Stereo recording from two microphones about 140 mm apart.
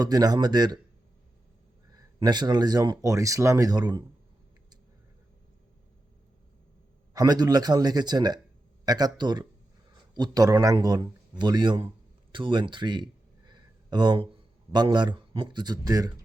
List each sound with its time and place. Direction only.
0.0 s speech: 25° right (ahead or behind)
1.9 s speech: 30° right (ahead or behind)
7.1 s speech: 25° right (ahead or behind)
13.5 s a sound: 30° right (ahead or behind)
14.7 s speech: 30° right (ahead or behind)